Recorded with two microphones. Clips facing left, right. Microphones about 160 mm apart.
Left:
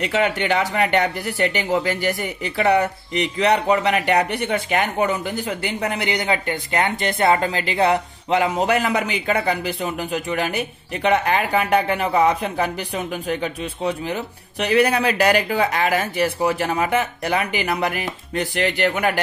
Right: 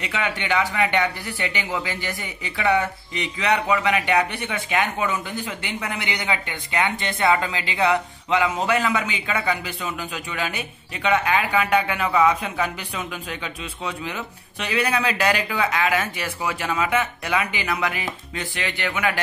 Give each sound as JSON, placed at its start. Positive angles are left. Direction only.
{"t": 0.1, "sound": "speech", "side_deg": 45}
{"t": 10.1, "sound": "speech", "side_deg": 50}
{"t": 11.1, "sound": "speech", "side_deg": 40}